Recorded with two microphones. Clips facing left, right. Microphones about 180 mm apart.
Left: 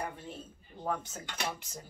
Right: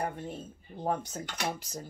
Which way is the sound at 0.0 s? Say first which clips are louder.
Right 5 dB; 50° right (ahead or behind).